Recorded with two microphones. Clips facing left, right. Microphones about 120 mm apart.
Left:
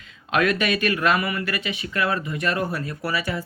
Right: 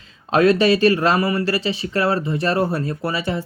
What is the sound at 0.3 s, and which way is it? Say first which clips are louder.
Speech: right 7 dB; 30° right (ahead or behind).